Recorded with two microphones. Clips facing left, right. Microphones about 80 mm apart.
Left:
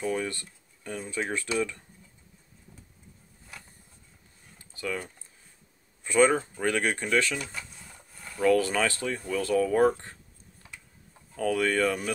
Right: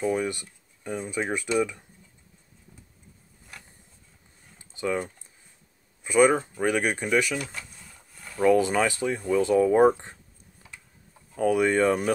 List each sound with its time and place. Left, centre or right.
0.0 s speech: centre
4.6 s typing: right
6.0 s speech: centre
11.3 s speech: centre